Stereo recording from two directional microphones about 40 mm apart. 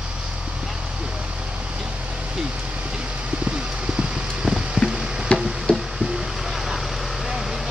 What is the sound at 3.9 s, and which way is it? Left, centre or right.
Vehicle, centre.